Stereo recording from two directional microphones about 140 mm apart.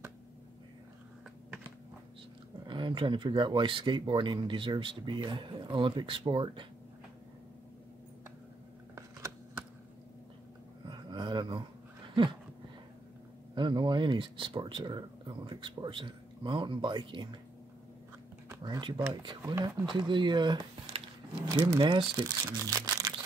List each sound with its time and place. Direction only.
2.6 s speech: 35° right (ahead or behind)
10.9 s a sound: 30° right (ahead or behind)
13.6 s speech: 35° right (ahead or behind)
18.5 s speech: 30° right (ahead or behind)
19.4 s speech: 20° right (ahead or behind)
19.9 s speech: 35° right (ahead or behind)